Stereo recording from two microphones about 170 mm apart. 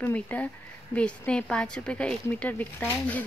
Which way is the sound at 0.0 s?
10° left (ahead or behind).